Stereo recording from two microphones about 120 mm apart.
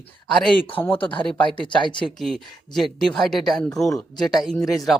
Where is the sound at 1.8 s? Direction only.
40° left (ahead or behind).